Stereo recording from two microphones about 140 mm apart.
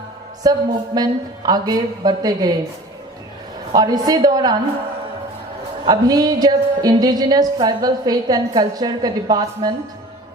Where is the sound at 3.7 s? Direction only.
30° right (ahead or behind).